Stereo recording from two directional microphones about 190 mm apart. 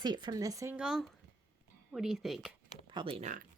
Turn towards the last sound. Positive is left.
turn(degrees=-30)  # may be behind; listen again after turning